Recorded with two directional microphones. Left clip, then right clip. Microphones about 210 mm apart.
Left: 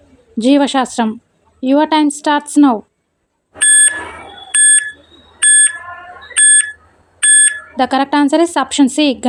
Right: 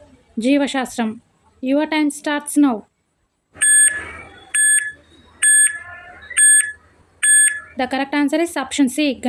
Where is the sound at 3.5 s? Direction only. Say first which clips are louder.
Left 4 dB; 15° left (ahead or behind).